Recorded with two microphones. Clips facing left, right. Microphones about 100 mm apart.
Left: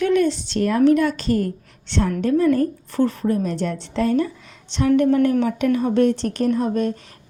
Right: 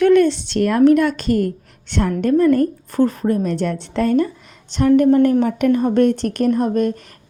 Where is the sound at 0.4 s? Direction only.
65° right (ahead or behind); by 3.4 s 40° right (ahead or behind).